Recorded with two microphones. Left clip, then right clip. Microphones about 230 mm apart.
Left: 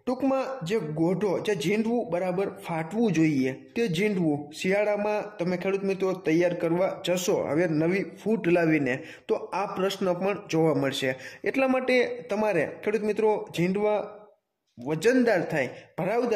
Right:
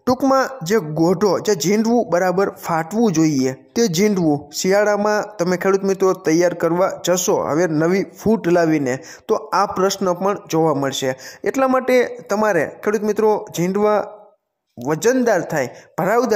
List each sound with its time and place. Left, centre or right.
0.0 s a man's voice: right